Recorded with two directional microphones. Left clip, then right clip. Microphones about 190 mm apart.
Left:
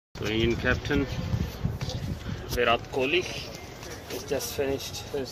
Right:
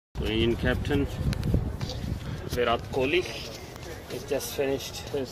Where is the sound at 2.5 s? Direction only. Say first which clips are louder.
Left 1 dB; 5° right (ahead or behind).